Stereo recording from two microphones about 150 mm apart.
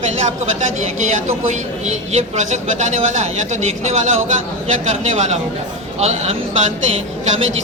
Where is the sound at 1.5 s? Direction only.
50° right (ahead or behind).